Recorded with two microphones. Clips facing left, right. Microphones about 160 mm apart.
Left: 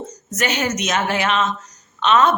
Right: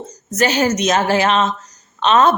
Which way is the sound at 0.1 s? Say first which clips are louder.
Right 7 dB; 35° right (ahead or behind).